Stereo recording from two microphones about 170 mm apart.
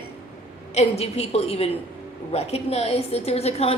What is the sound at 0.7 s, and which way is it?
A woman's voice, 40° left (ahead or behind).